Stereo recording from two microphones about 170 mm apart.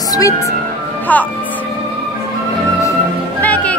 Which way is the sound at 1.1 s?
10° left (ahead or behind).